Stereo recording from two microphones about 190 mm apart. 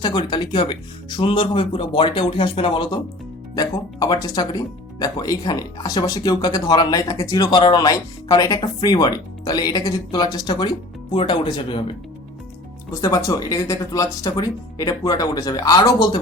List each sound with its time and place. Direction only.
0.0 s speech: 25° left (ahead or behind)
12.9 s speech: 20° left (ahead or behind)